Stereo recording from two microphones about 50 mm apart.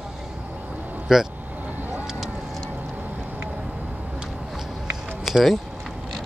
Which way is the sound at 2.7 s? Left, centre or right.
Right.